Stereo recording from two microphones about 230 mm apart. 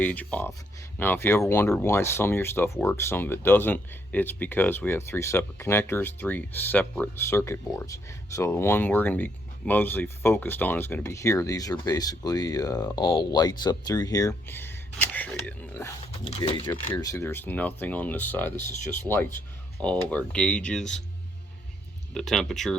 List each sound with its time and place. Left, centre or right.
0.0 s speech: centre
16.1 s speech: left
16.6 s speech: centre
22.1 s speech: centre